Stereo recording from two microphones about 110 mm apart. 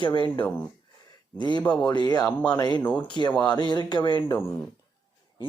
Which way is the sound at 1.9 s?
40° left (ahead or behind).